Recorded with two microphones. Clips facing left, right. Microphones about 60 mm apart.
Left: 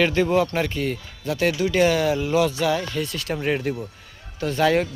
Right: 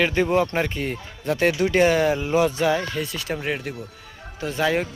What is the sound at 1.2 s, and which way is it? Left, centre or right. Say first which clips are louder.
Speech: right 2 dB; right.